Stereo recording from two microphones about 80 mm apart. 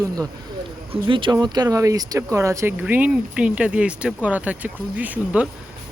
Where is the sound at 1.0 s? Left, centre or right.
Right.